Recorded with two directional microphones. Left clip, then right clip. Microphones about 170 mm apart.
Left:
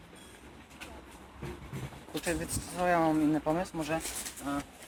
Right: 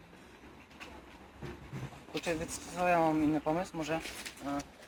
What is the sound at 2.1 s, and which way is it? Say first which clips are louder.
Speech: left 1 dB; 5° right (ahead or behind).